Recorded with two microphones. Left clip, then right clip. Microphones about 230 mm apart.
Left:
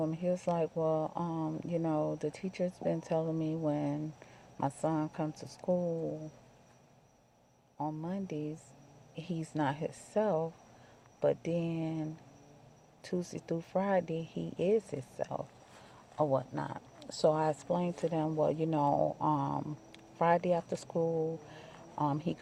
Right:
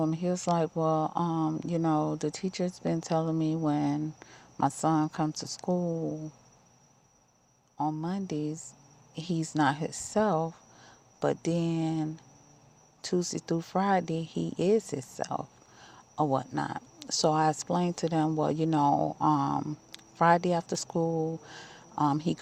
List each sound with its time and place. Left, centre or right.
0.0 s speech: right
7.8 s speech: right